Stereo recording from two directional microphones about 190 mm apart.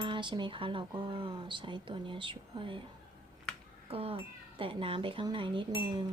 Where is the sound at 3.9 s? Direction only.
30° right (ahead or behind).